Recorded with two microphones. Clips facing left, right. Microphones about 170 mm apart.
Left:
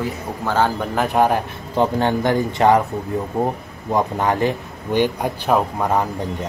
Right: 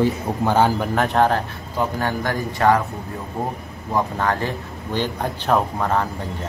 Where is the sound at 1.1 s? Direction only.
15° left (ahead or behind).